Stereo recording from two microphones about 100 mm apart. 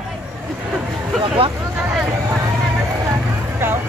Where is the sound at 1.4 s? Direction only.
70° right (ahead or behind).